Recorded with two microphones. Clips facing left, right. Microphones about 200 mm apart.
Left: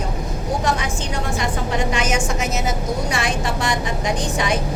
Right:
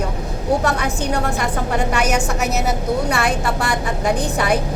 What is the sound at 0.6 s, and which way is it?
A woman's voice, 60° right (ahead or behind).